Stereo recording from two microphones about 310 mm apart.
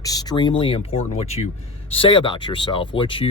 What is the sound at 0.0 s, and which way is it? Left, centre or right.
Speech, centre.